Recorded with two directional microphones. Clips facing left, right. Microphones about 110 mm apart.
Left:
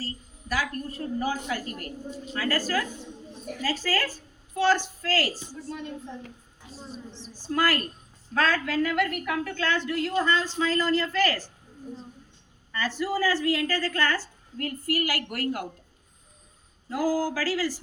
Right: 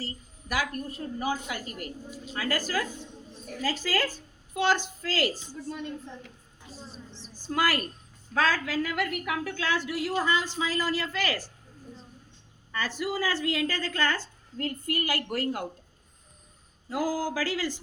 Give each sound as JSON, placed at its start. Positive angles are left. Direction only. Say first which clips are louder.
{"t": 0.0, "sound": "a woman's voice", "louder": "left 2 dB", "side_deg": -15}
{"t": 7.4, "sound": "a woman's voice", "louder": "left 2 dB", "side_deg": -15}
{"t": 12.8, "sound": "a woman's voice", "louder": "left 4 dB", "side_deg": -15}
{"t": 16.9, "sound": "a woman's voice", "louder": "left 3 dB", "side_deg": -20}